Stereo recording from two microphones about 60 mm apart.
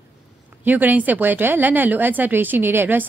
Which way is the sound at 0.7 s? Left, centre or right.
Right.